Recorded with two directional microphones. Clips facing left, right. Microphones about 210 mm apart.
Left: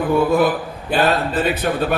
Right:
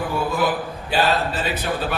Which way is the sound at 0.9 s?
55° left (ahead or behind).